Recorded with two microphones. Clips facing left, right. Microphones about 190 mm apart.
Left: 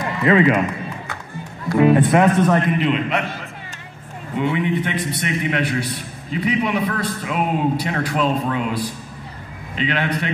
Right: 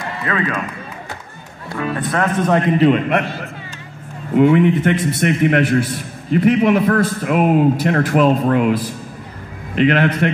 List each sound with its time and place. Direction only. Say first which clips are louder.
0.2 s speech: left 7 dB; 20° left (ahead or behind)
1.8 s speech: left 6 dB; 20° left (ahead or behind)
2.8 s a man's voice: right 6 dB; 50° right (ahead or behind)